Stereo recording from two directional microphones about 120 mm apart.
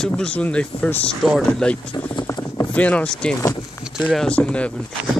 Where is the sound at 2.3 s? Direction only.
25° left (ahead or behind).